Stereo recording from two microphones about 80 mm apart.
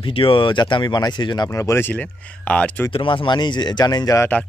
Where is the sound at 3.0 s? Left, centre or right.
Left.